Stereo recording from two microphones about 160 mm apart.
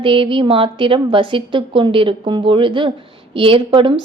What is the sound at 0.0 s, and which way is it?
A woman's voice, 35° right (ahead or behind).